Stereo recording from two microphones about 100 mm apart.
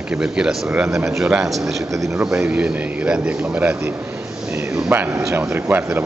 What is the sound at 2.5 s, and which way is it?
A man's voice, 10° right (ahead or behind).